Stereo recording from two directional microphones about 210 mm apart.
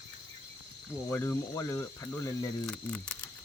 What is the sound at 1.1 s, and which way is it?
Speech, 10° left (ahead or behind).